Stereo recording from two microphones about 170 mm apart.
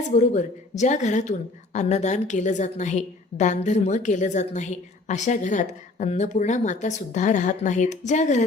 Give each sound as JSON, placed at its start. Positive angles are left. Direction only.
{"t": 0.2, "sound": "a woman's voice", "side_deg": 45}